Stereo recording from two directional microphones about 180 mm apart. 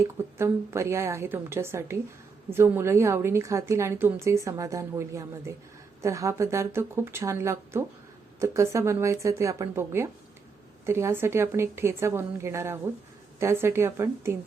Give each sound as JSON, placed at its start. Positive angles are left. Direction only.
{"t": 0.3, "sound": "a woman's voice", "side_deg": -15}